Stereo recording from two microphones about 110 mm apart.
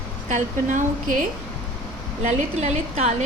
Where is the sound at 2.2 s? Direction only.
90° right.